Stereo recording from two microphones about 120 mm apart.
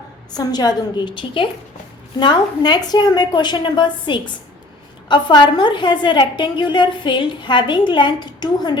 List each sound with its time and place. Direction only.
0.3 s a woman's voice: 35° left (ahead or behind)